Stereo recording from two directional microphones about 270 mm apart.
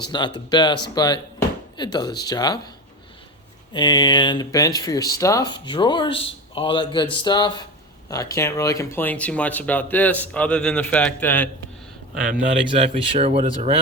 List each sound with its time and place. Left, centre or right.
0.0 s speech: centre
3.7 s speech: centre
12.6 s speech: centre